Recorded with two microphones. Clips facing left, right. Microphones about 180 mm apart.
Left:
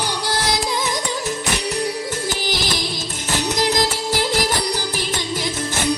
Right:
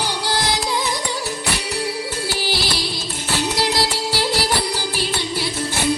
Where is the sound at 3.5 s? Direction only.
45° left (ahead or behind).